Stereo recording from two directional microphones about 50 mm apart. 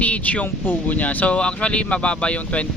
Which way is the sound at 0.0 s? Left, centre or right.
Left.